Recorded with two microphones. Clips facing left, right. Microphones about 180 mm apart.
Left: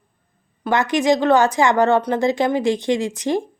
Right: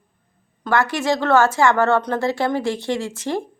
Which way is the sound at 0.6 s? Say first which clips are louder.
Left 2 dB; 20° left (ahead or behind).